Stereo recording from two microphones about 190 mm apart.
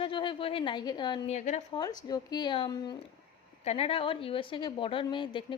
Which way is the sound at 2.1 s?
20° left (ahead or behind).